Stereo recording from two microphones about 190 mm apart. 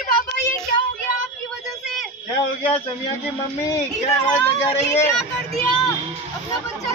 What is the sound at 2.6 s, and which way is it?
Speech, 30° left (ahead or behind).